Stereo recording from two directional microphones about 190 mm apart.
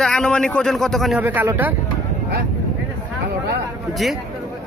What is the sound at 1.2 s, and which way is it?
Speech, 10° right (ahead or behind).